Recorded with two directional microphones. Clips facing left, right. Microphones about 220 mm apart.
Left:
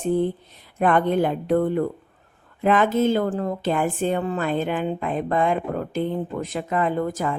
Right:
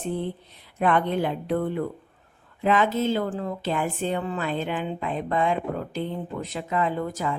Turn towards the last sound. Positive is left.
turn(degrees=50)  # may be behind; listen again after turning